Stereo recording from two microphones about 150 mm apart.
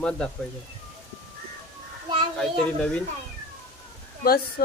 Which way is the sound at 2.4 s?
5° left (ahead or behind).